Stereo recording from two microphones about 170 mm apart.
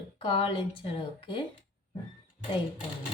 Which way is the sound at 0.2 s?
30° left (ahead or behind).